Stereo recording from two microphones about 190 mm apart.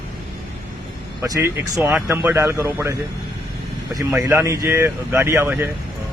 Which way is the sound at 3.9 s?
15° right (ahead or behind).